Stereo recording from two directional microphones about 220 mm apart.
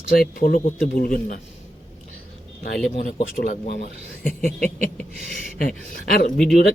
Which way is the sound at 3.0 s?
40° left (ahead or behind).